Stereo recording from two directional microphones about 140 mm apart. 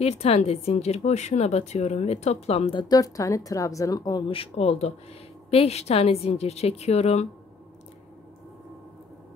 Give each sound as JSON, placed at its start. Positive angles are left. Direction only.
{"t": 0.0, "sound": "speech", "side_deg": 45}
{"t": 4.3, "sound": "speech", "side_deg": 45}